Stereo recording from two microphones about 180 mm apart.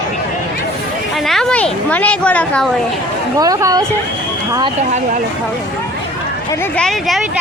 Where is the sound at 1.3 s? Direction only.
5° left (ahead or behind).